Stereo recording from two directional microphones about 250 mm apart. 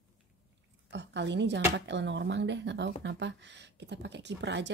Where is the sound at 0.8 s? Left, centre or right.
Right.